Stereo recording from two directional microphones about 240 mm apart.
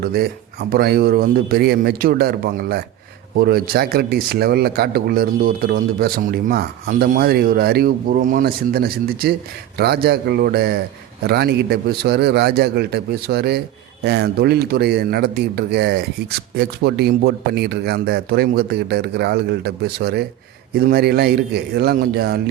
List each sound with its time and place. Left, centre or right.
0.0 s speech: right